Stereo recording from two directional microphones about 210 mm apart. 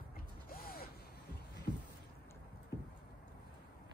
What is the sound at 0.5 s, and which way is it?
Mechanisms, 45° left (ahead or behind).